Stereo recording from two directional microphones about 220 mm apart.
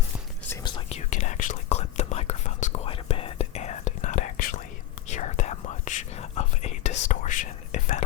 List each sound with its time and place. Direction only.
0.5 s whispering: 20° left (ahead or behind)